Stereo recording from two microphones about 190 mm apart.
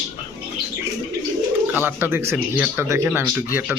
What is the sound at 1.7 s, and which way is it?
Speech, 10° right (ahead or behind).